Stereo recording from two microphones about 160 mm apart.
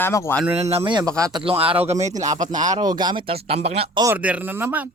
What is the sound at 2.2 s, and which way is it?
Speech, 25° right (ahead or behind).